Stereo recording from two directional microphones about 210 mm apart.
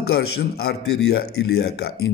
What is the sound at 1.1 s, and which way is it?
A man's voice, 50° left (ahead or behind).